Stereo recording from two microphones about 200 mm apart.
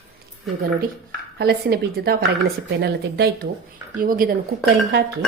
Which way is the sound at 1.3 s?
55° right (ahead or behind).